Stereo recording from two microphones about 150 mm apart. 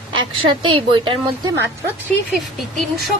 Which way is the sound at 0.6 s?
35° right (ahead or behind).